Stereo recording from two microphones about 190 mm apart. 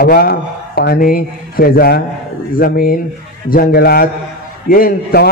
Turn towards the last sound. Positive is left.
turn(degrees=50)  # may be behind; listen again after turning